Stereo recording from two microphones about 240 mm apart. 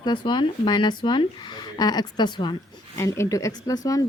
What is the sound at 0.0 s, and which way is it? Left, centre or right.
A woman's voice, centre.